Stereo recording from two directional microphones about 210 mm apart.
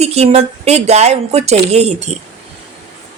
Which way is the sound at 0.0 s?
30° right (ahead or behind).